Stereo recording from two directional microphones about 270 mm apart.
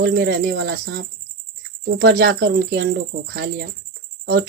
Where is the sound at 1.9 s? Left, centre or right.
Right.